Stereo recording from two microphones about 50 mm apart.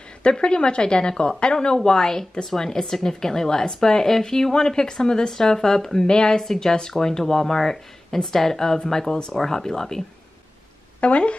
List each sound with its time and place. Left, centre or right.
0.2 s a woman's voice: centre
11.0 s a woman's voice: left